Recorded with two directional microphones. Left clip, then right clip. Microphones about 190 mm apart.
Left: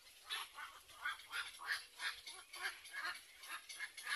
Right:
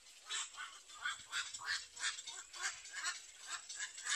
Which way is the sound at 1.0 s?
55° right (ahead or behind).